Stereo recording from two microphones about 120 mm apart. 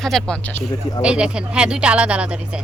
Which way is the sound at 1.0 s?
10° right (ahead or behind).